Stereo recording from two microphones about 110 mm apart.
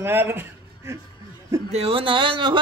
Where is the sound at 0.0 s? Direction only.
20° right (ahead or behind).